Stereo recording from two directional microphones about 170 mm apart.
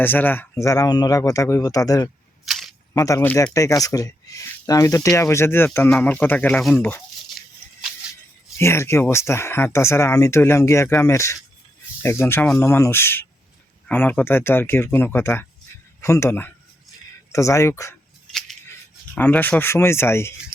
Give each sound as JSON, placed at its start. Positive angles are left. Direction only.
{"t": 0.0, "sound": "speech", "side_deg": 10}
{"t": 2.5, "sound": "camera", "side_deg": 0}
{"t": 3.0, "sound": "speech", "side_deg": 15}
{"t": 8.5, "sound": "speech", "side_deg": 15}
{"t": 19.1, "sound": "speech", "side_deg": 10}